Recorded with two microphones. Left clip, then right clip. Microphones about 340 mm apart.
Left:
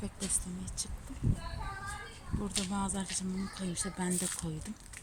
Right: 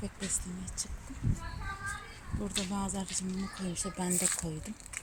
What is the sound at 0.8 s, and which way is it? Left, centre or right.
Speech, centre.